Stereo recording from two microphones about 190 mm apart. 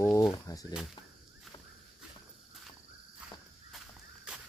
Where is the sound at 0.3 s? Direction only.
20° left (ahead or behind).